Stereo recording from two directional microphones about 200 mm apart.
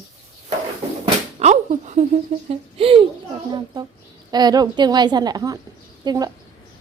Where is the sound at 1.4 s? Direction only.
35° right (ahead or behind).